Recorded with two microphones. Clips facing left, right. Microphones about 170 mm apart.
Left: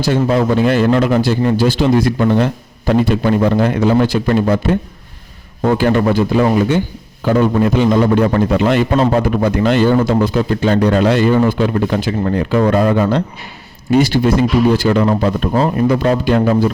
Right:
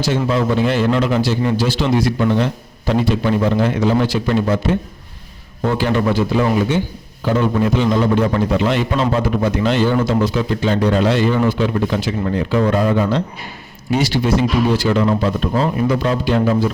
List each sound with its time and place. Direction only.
0.1 s a man's voice: 50° left (ahead or behind)